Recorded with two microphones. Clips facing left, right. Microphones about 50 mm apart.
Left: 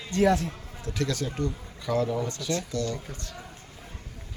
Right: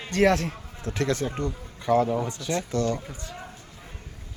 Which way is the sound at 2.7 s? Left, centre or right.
Right.